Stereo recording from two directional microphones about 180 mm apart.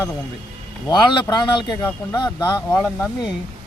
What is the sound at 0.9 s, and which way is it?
Speech, 25° left (ahead or behind).